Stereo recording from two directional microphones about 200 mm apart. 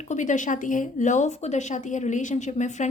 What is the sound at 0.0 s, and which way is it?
A woman's voice, 35° left (ahead or behind).